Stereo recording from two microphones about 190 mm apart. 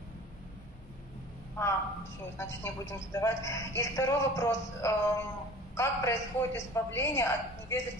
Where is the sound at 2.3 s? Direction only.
15° left (ahead or behind).